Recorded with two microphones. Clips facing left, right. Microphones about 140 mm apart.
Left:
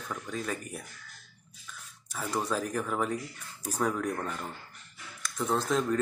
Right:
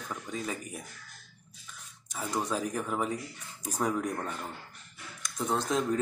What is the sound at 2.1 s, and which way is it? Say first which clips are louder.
Speech: left 1 dB; 15° right (ahead or behind).